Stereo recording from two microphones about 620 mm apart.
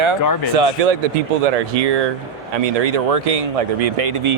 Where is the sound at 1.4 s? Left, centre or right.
Right.